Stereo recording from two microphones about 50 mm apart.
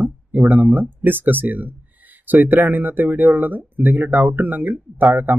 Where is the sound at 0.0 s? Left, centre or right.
Right.